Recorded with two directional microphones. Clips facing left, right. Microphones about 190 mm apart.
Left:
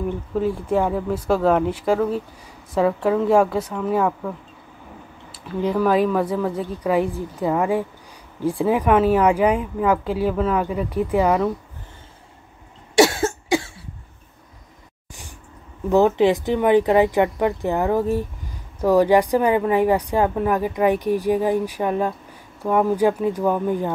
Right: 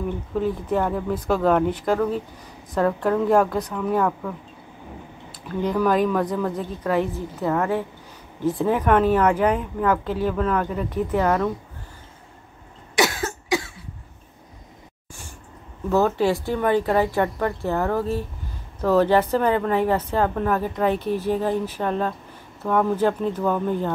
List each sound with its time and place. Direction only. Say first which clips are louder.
0.3 s a woman's voice: left 2 dB; 5° left (ahead or behind)
5.5 s a woman's voice: left 2 dB; 5° left (ahead or behind)
12.9 s cough: left 6 dB; 30° left (ahead or behind)
15.9 s a woman's voice: left 4 dB; 20° left (ahead or behind)